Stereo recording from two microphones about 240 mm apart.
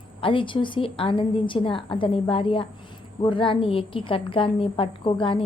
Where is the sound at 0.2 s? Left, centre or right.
Left.